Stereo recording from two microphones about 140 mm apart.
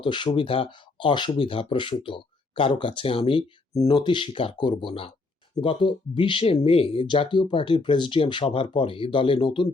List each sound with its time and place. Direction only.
0.0 s speech: 35° left (ahead or behind)